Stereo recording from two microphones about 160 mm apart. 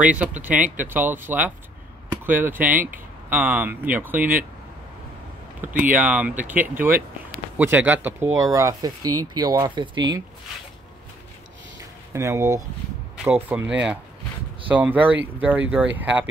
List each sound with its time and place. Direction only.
0.0 s speech: 10° right (ahead or behind)
5.9 s speech: 10° right (ahead or behind); by 10.0 s 25° right (ahead or behind)
11.8 s a sound: 20° right (ahead or behind)
13.2 s speech: 10° right (ahead or behind)